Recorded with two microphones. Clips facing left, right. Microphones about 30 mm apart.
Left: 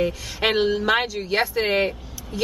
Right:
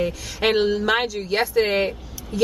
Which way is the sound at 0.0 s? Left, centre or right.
Centre.